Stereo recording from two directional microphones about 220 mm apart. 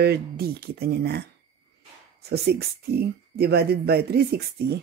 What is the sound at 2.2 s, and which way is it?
Speech, 45° right (ahead or behind).